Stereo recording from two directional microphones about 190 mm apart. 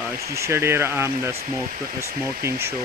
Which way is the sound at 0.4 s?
15° right (ahead or behind).